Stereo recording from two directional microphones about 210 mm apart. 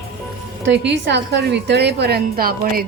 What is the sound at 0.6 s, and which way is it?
A woman's voice, 55° right (ahead or behind).